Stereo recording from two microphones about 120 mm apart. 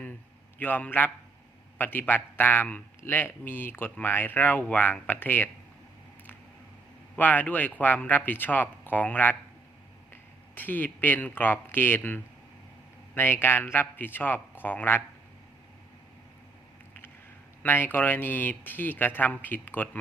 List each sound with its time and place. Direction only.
0.6 s a man's voice: 15° left (ahead or behind)
7.2 s a man's voice: 15° left (ahead or behind)
17.6 s a man's voice: 15° left (ahead or behind)